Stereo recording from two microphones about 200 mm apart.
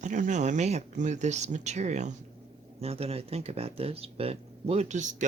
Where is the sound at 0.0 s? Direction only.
40° right (ahead or behind).